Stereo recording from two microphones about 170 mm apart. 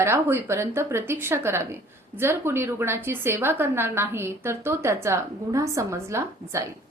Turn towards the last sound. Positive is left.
turn(degrees=-15)  # may be behind; listen again after turning